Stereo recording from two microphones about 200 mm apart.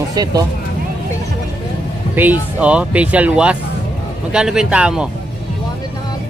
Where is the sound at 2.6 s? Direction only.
5° right (ahead or behind).